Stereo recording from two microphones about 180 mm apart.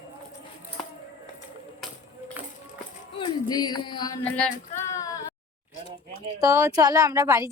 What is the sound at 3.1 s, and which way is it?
Music, 20° left (ahead or behind).